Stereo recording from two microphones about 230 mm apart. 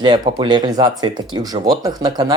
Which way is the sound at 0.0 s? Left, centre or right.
Centre.